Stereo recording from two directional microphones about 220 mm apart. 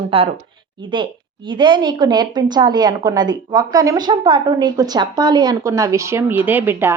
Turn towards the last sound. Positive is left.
turn(degrees=-10)  # may be behind; listen again after turning